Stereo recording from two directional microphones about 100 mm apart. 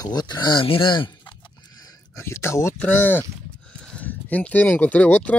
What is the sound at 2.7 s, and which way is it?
Speech, 15° left (ahead or behind).